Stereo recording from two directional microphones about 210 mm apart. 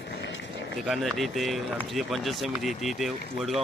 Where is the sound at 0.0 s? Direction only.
55° left (ahead or behind).